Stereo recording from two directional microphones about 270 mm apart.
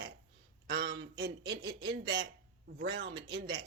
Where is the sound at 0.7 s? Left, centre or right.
Right.